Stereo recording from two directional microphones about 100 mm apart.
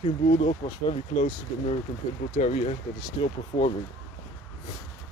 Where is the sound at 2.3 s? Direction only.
90° left.